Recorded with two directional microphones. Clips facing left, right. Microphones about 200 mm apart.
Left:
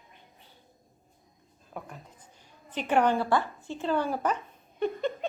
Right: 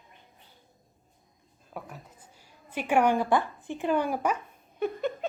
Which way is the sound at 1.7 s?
5° right (ahead or behind).